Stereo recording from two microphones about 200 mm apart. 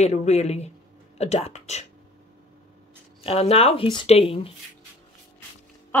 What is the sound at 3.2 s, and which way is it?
Speech, 30° left (ahead or behind).